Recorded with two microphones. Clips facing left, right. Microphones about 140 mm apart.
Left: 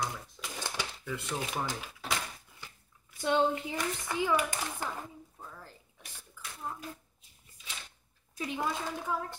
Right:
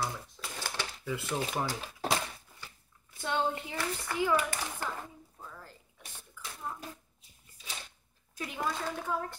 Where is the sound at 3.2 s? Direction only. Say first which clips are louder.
Left 4 dB; 15° left (ahead or behind).